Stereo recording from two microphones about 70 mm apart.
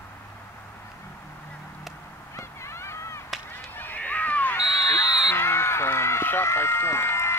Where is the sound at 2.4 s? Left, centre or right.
Left.